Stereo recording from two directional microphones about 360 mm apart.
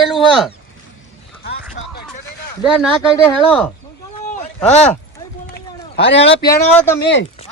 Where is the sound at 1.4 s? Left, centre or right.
Left.